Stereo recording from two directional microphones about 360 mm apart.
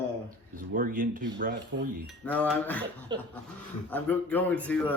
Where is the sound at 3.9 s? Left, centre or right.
Centre.